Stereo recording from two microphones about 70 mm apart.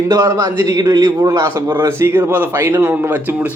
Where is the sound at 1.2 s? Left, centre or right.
Right.